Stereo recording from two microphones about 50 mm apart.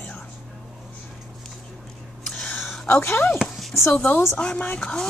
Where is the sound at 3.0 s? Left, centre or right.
Left.